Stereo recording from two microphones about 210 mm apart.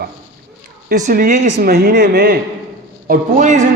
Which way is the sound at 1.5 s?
50° right (ahead or behind).